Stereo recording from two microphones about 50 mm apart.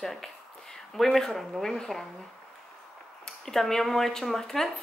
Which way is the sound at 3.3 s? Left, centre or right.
Centre.